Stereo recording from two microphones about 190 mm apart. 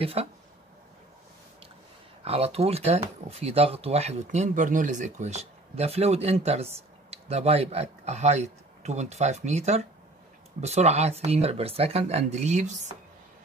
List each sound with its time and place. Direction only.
0.0 s speech: 30° right (ahead or behind)
2.2 s speech: 30° right (ahead or behind)